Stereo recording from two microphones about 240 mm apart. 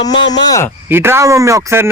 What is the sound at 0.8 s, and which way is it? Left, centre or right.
Speech, centre.